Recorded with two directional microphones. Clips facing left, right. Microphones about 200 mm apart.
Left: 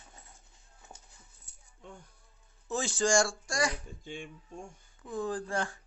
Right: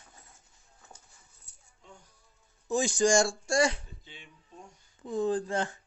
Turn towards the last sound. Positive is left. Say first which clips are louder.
# right 4 dB
turn(degrees=-20)  # may be behind; listen again after turning